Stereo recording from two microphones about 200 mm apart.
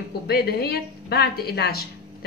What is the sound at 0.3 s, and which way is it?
A woman's voice, 50° left (ahead or behind).